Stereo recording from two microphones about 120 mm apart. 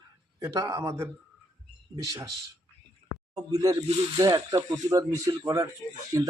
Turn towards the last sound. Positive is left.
turn(degrees=-30)  # may be behind; listen again after turning